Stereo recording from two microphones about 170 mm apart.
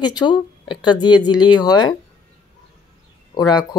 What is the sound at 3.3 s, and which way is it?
Speech, 20° left (ahead or behind).